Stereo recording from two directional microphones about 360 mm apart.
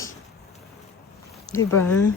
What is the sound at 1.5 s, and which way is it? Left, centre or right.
Speech, centre.